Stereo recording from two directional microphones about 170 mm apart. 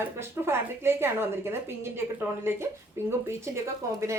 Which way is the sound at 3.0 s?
15° right (ahead or behind).